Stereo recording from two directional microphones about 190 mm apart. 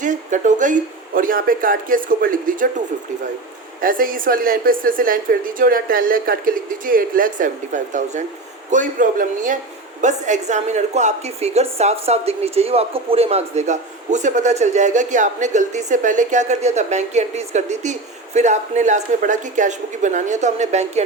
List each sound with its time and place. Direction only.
0.0 s a woman's voice: 40° right (ahead or behind)
3.8 s a woman's voice: 50° right (ahead or behind)